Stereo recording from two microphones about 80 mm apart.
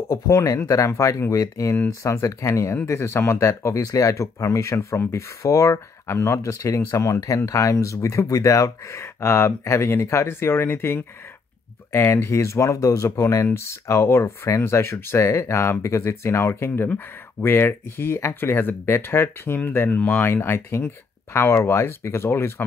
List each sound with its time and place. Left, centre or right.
0.1 s speech: left